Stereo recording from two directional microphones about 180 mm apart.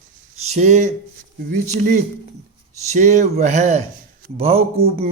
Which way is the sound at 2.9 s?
40° right (ahead or behind).